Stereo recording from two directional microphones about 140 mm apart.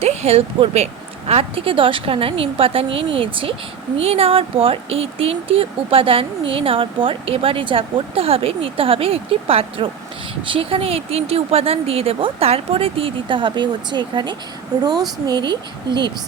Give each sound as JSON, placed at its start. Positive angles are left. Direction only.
{"t": 0.0, "sound": "a woman's voice", "side_deg": -50}